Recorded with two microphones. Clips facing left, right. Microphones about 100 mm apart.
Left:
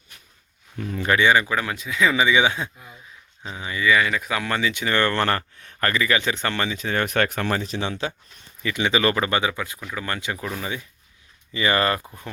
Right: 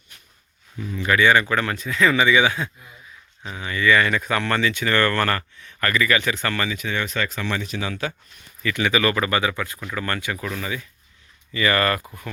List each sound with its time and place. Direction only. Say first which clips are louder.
0.8 s speech: left 1 dB; 50° left (ahead or behind)
1.0 s speech: right 1 dB; 25° left (ahead or behind)
7.0 s speech: left 4 dB; 60° left (ahead or behind); by 12.0 s 25° left (ahead or behind)